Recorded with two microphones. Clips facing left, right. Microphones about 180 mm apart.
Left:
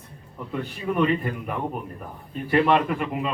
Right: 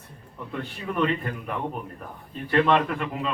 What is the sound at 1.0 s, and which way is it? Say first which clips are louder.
Speech: left 2 dB; 10° left (ahead or behind).